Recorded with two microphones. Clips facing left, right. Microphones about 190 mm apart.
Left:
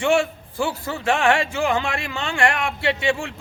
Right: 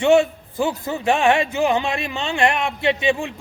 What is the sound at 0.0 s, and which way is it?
A man's voice, 20° right (ahead or behind).